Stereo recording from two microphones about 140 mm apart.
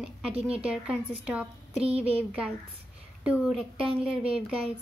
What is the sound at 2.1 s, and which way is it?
Speech, 10° right (ahead or behind).